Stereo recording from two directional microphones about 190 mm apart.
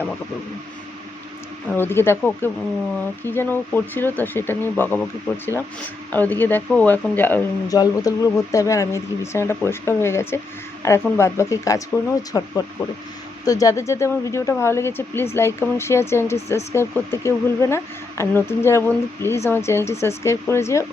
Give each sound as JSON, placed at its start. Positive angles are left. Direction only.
{"t": 1.7, "sound": "speech", "side_deg": 10}